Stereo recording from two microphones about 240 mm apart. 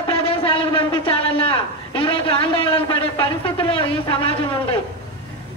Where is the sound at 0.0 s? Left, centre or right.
Left.